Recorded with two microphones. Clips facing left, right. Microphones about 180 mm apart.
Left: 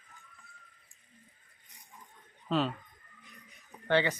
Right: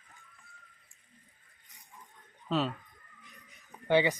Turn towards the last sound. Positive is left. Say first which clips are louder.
# right 2 dB
turn(degrees=-15)  # may be behind; listen again after turning